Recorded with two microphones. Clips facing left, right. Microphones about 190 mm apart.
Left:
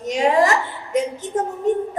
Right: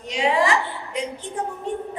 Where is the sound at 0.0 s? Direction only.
45° left (ahead or behind).